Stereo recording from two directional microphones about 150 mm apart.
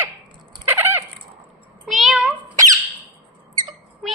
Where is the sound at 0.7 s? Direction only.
15° right (ahead or behind).